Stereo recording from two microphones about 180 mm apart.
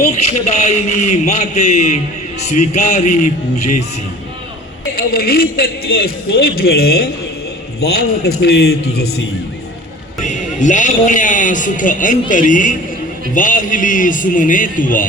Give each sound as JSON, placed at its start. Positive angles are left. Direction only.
{"t": 0.1, "sound": "a man's voice", "side_deg": 35}
{"t": 4.9, "sound": "a man's voice", "side_deg": 55}
{"t": 10.2, "sound": "a man's voice", "side_deg": 45}